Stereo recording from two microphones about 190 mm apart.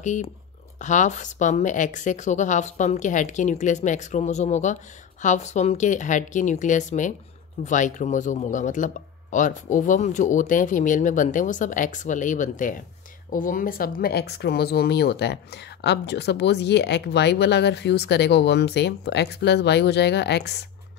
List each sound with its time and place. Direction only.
0.0 s speech: 40° left (ahead or behind); by 20.5 s 60° left (ahead or behind)